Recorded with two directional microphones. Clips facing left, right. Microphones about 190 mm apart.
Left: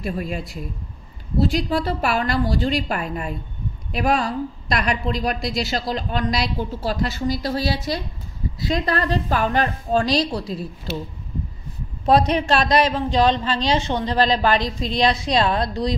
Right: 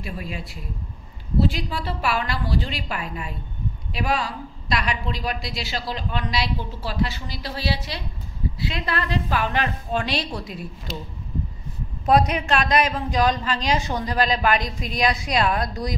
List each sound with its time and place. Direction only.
0.0 s a woman's voice: 45° left (ahead or behind)
1.4 s a woman's voice: 40° left (ahead or behind)
12.1 s a woman's voice: 30° left (ahead or behind)